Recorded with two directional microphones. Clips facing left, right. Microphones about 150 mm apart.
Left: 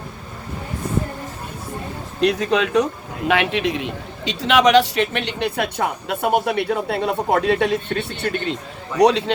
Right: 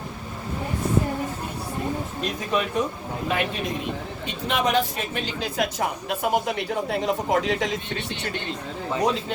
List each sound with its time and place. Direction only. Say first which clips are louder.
2.2 s a man's voice: left 9 dB; 85° left; by 8.5 s 60° left (ahead or behind)
9.0 s speech: left 9 dB; 80° left